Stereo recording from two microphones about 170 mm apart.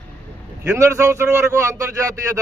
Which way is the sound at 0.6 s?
15° right (ahead or behind).